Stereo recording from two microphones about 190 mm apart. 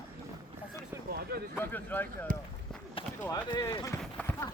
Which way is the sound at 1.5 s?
10° left (ahead or behind).